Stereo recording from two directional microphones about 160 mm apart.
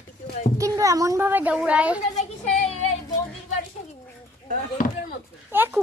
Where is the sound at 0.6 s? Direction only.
20° right (ahead or behind).